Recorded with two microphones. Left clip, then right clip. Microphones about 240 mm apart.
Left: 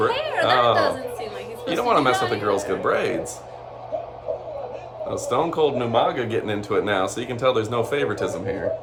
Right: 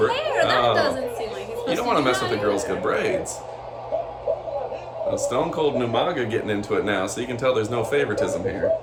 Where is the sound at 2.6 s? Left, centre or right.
Centre.